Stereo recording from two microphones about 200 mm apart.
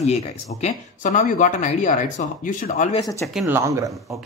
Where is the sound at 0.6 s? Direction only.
35° left (ahead or behind).